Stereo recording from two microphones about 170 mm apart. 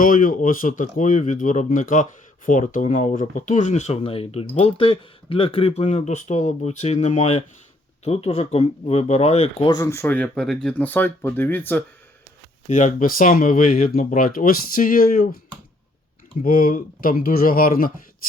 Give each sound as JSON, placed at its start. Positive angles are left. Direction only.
{"t": 0.0, "sound": "speech", "side_deg": 50}
{"t": 9.6, "sound": "speech", "side_deg": 20}
{"t": 12.6, "sound": "speech", "side_deg": 50}
{"t": 16.4, "sound": "speech", "side_deg": 55}